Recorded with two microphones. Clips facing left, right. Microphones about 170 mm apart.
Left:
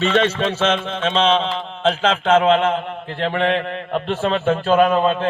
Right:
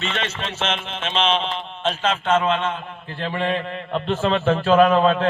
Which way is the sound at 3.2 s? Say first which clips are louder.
Left 4 dB; 65° left (ahead or behind).